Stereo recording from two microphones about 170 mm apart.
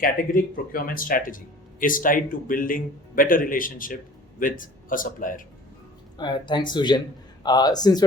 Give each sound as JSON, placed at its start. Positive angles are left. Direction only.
{"t": 0.0, "sound": "a man's voice", "side_deg": 55}
{"t": 6.1, "sound": "speech", "side_deg": 25}